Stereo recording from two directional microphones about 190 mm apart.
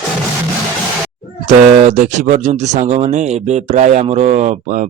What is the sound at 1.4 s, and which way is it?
Speech, 40° right (ahead or behind).